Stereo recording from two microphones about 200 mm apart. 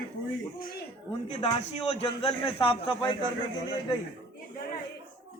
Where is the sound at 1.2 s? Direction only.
30° left (ahead or behind).